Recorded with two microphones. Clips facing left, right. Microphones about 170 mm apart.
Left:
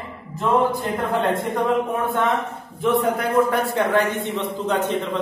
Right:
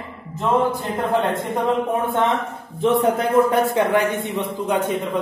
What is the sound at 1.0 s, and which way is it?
Speech, 20° right (ahead or behind).